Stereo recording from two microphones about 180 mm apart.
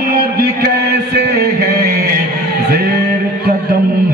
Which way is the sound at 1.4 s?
60° right (ahead or behind).